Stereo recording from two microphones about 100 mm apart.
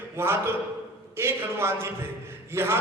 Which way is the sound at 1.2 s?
25° right (ahead or behind).